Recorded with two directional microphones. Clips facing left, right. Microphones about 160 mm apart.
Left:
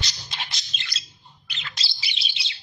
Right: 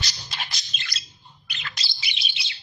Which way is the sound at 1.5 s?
25° left (ahead or behind).